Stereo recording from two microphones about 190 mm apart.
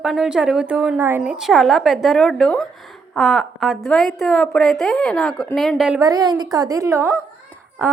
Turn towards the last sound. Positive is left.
turn(degrees=-15)  # may be behind; listen again after turning